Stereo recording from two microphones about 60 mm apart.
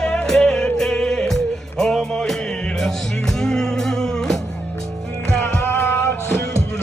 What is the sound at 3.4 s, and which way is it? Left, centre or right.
Music, centre.